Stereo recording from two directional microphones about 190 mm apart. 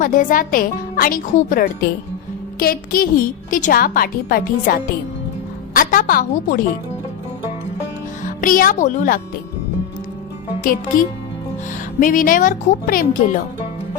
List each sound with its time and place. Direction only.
0.0 s a woman's voice: 45° left (ahead or behind)
8.2 s a woman's voice: 45° left (ahead or behind)
10.6 s a woman's voice: 50° left (ahead or behind)